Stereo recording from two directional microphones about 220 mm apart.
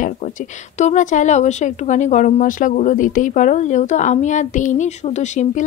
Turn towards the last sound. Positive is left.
turn(degrees=30)  # may be behind; listen again after turning